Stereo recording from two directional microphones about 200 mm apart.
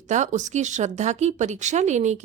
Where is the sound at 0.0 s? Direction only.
35° right (ahead or behind).